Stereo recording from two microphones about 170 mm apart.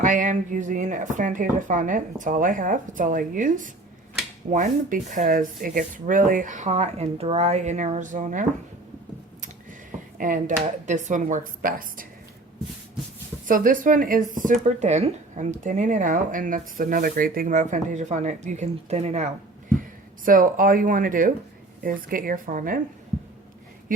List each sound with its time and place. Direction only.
0.0 s speech: 50° right (ahead or behind)
10.2 s speech: 55° right (ahead or behind)
13.5 s speech: 50° right (ahead or behind)
20.2 s speech: 50° right (ahead or behind)